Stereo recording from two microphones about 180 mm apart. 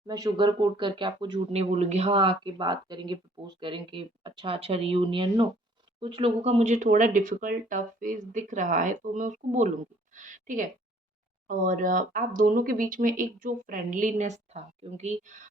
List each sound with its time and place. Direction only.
0.1 s speech: 20° right (ahead or behind); by 15.4 s 40° right (ahead or behind)